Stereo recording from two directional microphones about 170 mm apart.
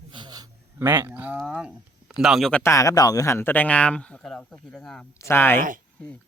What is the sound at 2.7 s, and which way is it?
Speech, 20° left (ahead or behind).